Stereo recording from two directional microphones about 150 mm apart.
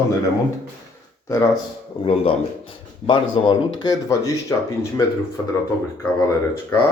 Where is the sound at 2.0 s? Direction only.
35° left (ahead or behind); by 5.0 s 20° left (ahead or behind).